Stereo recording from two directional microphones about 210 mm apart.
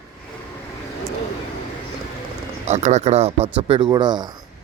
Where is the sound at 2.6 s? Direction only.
35° right (ahead or behind).